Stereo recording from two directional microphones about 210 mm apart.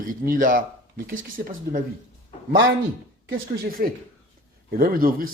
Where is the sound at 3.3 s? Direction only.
45° right (ahead or behind).